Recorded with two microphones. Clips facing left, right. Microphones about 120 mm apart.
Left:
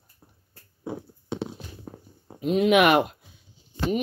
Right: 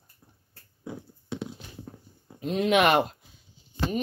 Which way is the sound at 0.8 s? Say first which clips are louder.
Left 5 dB; 30° left (ahead or behind).